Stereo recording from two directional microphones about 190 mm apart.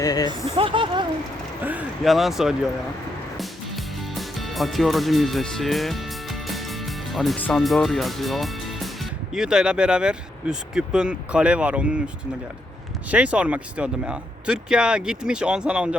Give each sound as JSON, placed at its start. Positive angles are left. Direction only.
{"t": 0.0, "sound": "speech", "side_deg": 20}
{"t": 0.3, "sound": "speech", "side_deg": -25}
{"t": 1.6, "sound": "speech", "side_deg": -5}